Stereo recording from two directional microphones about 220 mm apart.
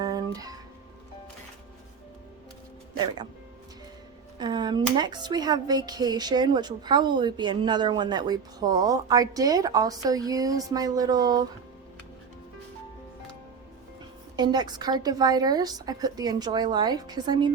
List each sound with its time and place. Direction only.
0.0 s music: 15° right (ahead or behind)
4.4 s speech: 20° right (ahead or behind)
14.3 s a woman's voice: 20° right (ahead or behind)